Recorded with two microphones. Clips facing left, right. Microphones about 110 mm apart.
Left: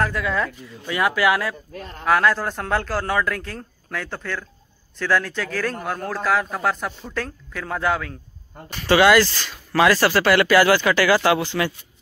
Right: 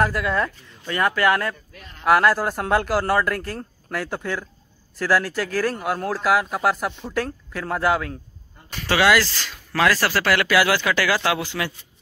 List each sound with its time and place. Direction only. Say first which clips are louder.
0.0 s speech: right 1 dB; 5° right (ahead or behind)
0.8 s speech: even; 10° left (ahead or behind)
1.7 s a man's voice: left 9 dB; 40° left (ahead or behind)
2.0 s speech: right 2 dB; 5° right (ahead or behind)